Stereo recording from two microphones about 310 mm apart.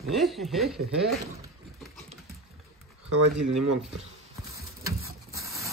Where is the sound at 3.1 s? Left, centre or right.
Right.